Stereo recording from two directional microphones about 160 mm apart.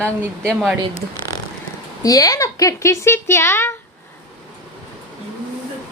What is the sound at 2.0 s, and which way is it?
A woman's voice, 20° left (ahead or behind).